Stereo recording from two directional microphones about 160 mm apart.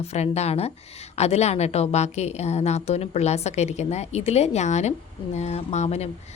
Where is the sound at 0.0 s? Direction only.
40° left (ahead or behind).